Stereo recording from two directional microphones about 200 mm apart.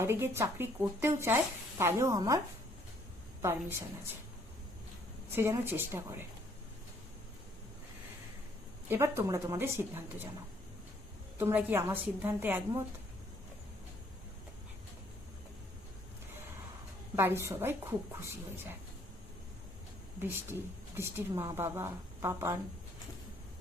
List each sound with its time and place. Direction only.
0.0 s a woman's voice: 15° right (ahead or behind)
3.4 s a woman's voice: 10° right (ahead or behind)
5.3 s a woman's voice: 10° right (ahead or behind)
8.9 s a woman's voice: 15° right (ahead or behind)
11.3 s a woman's voice: 10° right (ahead or behind)
17.2 s a woman's voice: 10° right (ahead or behind)
20.2 s a woman's voice: 10° right (ahead or behind)